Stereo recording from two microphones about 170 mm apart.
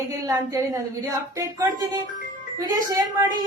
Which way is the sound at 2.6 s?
20° right (ahead or behind).